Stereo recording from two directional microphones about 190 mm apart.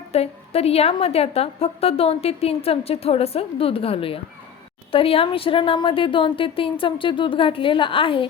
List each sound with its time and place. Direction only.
0.1 s a woman's voice: 35° left (ahead or behind)